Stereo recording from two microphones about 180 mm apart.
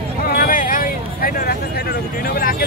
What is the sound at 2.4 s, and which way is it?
Vehicle, 55° left (ahead or behind).